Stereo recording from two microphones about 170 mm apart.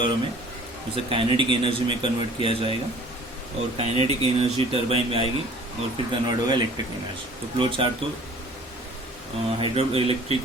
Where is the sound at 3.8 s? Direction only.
35° right (ahead or behind).